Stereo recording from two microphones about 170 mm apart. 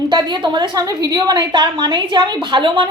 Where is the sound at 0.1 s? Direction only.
25° right (ahead or behind).